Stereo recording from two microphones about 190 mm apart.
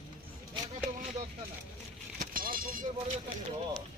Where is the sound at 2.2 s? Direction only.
50° right (ahead or behind).